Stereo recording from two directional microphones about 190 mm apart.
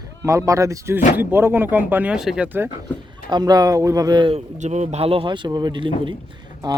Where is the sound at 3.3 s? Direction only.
20° right (ahead or behind).